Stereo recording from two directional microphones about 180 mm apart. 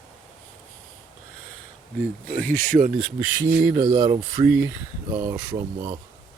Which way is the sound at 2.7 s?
20° right (ahead or behind).